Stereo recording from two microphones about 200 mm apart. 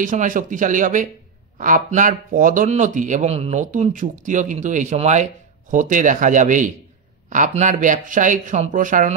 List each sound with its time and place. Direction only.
0.0 s speech: 40° right (ahead or behind)